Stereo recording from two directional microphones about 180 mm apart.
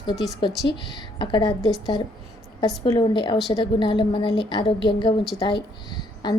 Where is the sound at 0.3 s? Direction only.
25° left (ahead or behind).